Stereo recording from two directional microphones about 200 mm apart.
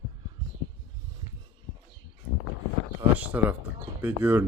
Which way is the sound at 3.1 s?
10° right (ahead or behind).